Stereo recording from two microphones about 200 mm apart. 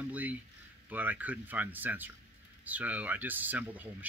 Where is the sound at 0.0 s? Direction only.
5° right (ahead or behind).